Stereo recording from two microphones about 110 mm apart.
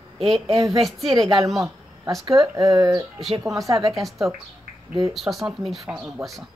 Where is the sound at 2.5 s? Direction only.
35° right (ahead or behind).